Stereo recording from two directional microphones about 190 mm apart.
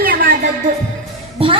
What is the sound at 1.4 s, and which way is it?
Speech, 30° right (ahead or behind).